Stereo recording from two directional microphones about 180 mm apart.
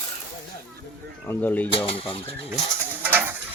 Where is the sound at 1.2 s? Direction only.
10° left (ahead or behind).